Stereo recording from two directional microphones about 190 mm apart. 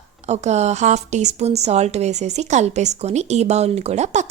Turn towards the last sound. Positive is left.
turn(degrees=-40)  # may be behind; listen again after turning